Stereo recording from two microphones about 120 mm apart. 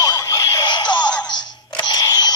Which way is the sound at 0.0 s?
30° left (ahead or behind).